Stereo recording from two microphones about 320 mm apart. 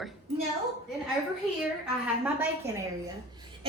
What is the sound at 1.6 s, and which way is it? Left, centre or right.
A woman's voice, centre.